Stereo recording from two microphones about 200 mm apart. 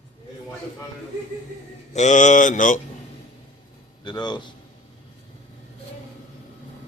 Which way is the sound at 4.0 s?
20° left (ahead or behind).